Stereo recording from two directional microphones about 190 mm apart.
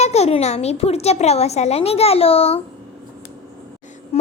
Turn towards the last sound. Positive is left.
turn(degrees=35)  # may be behind; listen again after turning